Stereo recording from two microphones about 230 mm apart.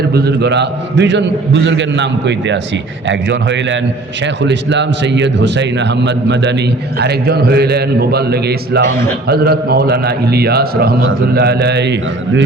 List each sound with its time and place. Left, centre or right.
0.1 s a man's voice: right